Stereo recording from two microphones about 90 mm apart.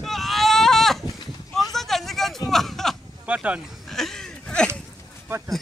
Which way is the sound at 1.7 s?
Centre (ahead or behind).